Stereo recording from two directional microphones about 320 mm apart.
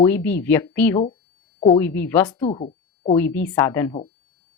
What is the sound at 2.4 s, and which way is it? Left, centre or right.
Speech, centre.